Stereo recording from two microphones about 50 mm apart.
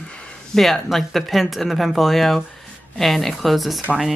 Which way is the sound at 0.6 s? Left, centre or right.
Centre.